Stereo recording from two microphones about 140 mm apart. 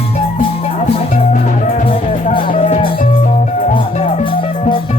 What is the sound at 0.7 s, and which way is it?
Music, 65° left (ahead or behind).